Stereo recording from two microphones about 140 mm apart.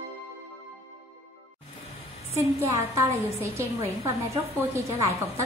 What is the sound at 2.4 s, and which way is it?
A woman's voice, 20° right (ahead or behind).